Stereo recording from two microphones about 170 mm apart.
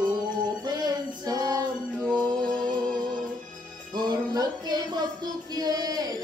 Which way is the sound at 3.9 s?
25° right (ahead or behind).